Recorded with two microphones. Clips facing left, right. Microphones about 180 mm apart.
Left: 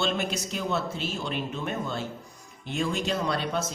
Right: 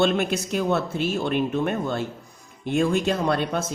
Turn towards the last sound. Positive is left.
turn(degrees=-55)  # may be behind; listen again after turning